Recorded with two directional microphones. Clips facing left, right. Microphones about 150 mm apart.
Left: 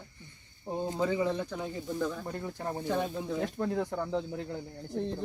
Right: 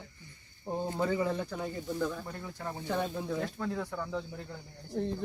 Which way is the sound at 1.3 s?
5° right (ahead or behind).